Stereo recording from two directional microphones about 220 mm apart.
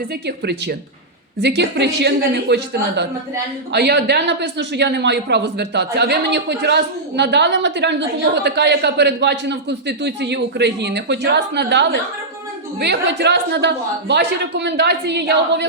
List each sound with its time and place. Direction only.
0.3 s speech: 50° right (ahead or behind)